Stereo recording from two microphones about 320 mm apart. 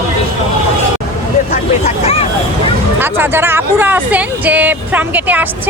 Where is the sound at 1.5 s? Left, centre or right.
Centre.